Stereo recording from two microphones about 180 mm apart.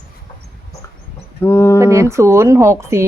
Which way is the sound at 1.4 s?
15° left (ahead or behind).